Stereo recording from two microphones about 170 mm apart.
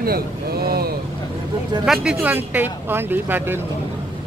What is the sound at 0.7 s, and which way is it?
Vehicle, 65° right (ahead or behind).